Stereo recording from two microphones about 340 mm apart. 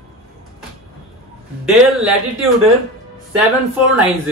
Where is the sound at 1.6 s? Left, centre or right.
Centre.